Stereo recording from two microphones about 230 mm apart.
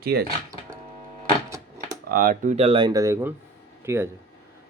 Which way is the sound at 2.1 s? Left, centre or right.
Right.